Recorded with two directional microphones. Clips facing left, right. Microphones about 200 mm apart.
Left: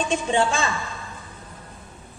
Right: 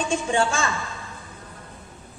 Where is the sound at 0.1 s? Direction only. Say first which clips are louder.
Left 1 dB; 20° left (ahead or behind).